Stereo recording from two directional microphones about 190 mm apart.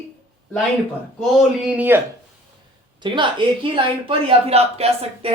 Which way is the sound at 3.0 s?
25° right (ahead or behind).